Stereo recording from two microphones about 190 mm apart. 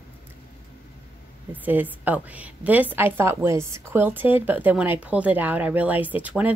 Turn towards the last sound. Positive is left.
turn(degrees=-10)  # may be behind; listen again after turning